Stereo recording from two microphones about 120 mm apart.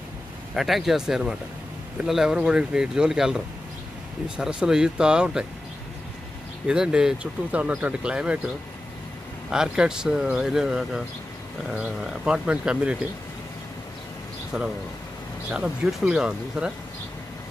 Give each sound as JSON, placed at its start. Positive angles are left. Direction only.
{"t": 0.6, "sound": "speech", "side_deg": 0}
{"t": 6.7, "sound": "speech", "side_deg": -5}
{"t": 9.5, "sound": "speech", "side_deg": -5}
{"t": 14.5, "sound": "speech", "side_deg": -5}